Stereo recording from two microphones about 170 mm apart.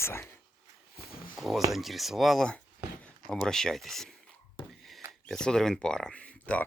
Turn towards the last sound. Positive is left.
turn(degrees=5)  # may be behind; listen again after turning